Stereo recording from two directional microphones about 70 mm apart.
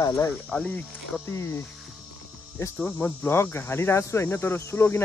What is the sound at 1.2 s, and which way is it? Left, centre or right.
Speech, left.